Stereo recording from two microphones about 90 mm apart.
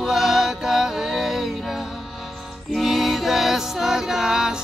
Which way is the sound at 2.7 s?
5° right (ahead or behind).